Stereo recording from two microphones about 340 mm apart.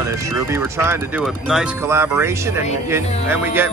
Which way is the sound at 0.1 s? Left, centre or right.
Centre.